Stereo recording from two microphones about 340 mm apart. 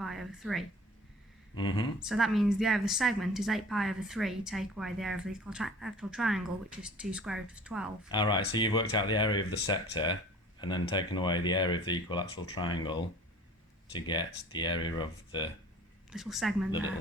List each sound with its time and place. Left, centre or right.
0.0 s a woman's voice: centre
1.5 s speech: centre
2.0 s a woman's voice: centre
8.1 s speech: centre
16.1 s a woman's voice: centre